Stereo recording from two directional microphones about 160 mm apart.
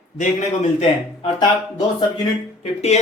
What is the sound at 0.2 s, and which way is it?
Speech, 45° left (ahead or behind).